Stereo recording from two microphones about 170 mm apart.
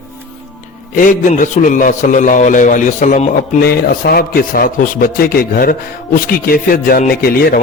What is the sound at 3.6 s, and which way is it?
Speech, 65° left (ahead or behind).